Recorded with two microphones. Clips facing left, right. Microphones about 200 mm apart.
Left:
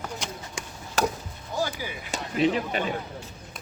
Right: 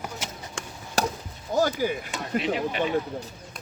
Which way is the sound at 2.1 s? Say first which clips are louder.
Left 3 dB; 40° left (ahead or behind).